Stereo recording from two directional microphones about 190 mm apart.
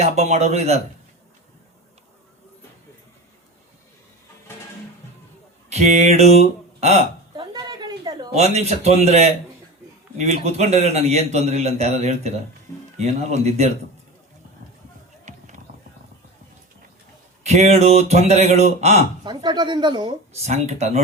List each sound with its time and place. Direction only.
0.0 s a man's voice: 35° right (ahead or behind)
5.6 s speech: 35° right (ahead or behind)
7.5 s a sound: 20° right (ahead or behind)
8.4 s a man's voice: 35° right (ahead or behind)
15.2 s music: 40° right (ahead or behind)
17.4 s a man's voice: 35° right (ahead or behind)
19.2 s speech: 25° right (ahead or behind)
20.5 s a man's voice: 35° right (ahead or behind)